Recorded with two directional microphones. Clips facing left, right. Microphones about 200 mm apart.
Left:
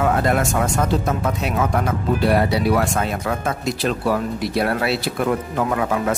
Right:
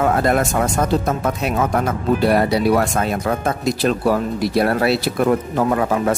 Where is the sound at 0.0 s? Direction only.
40° right (ahead or behind).